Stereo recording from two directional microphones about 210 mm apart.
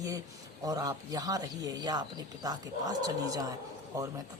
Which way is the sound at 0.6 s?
15° right (ahead or behind).